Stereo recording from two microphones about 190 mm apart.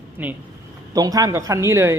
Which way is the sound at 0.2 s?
10° right (ahead or behind).